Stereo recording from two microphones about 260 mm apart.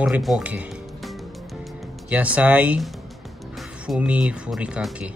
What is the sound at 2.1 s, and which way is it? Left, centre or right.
Speech, centre.